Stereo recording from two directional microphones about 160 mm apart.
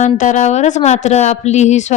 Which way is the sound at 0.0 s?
50° left (ahead or behind).